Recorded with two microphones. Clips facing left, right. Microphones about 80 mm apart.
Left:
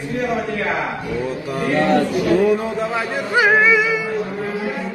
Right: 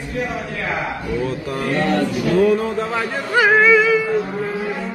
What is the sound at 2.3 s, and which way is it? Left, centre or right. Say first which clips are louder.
Speech: right 2 dB; centre.